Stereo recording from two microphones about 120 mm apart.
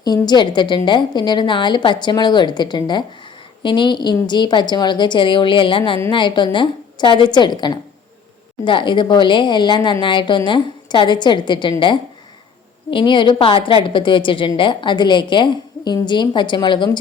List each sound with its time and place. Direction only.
0.0 s a woman's voice: 35° left (ahead or behind)
12.9 s a woman's voice: 40° left (ahead or behind)